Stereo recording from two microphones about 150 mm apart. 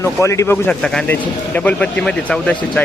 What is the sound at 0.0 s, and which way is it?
Speech, 20° left (ahead or behind).